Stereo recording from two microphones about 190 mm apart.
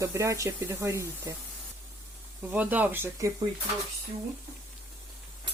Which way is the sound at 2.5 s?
10° right (ahead or behind).